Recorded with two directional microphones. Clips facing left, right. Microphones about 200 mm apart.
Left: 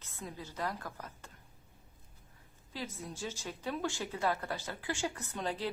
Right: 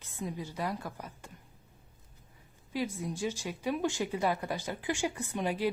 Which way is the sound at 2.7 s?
15° right (ahead or behind).